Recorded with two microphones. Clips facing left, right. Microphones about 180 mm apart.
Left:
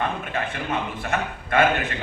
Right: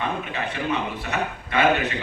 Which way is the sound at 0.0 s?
50° left (ahead or behind).